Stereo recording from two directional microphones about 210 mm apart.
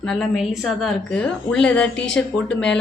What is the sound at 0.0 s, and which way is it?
A woman's voice, 5° left (ahead or behind).